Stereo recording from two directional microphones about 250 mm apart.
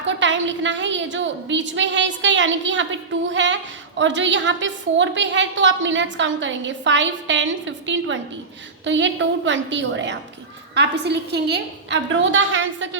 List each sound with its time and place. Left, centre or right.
0.2 s a woman's voice: right